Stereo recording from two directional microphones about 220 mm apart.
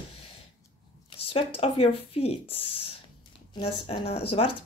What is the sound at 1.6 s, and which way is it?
Speech, 25° left (ahead or behind).